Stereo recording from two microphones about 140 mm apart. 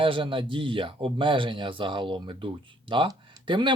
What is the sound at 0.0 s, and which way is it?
Speech, 40° right (ahead or behind).